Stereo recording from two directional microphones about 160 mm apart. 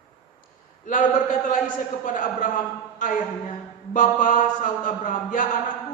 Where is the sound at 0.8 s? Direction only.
55° left (ahead or behind).